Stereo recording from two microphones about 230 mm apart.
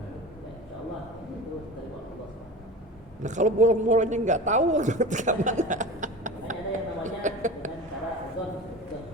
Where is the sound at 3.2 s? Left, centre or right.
Right.